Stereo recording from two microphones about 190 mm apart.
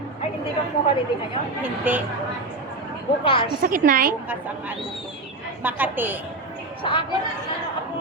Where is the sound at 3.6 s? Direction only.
45° right (ahead or behind).